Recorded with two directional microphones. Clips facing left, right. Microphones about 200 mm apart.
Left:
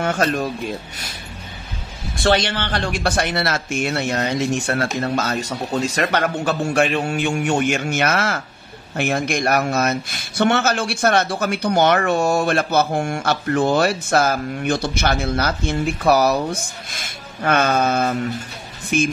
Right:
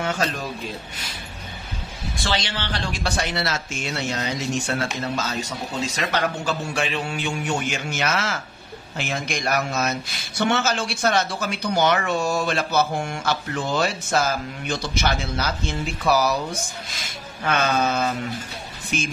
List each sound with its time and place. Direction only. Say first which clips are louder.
0.0 s speech: left 6 dB; 55° left (ahead or behind)
2.2 s speech: left 9 dB; 55° left (ahead or behind)
17.4 s speech: left 4 dB; 50° left (ahead or behind)